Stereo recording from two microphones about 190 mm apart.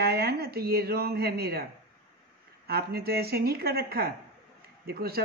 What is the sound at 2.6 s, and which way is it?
Speech, 55° right (ahead or behind).